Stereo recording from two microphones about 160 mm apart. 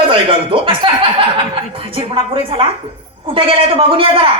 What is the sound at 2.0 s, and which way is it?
A man's voice, 30° right (ahead or behind).